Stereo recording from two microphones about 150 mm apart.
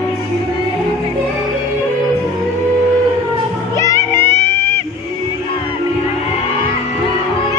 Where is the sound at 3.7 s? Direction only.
20° left (ahead or behind).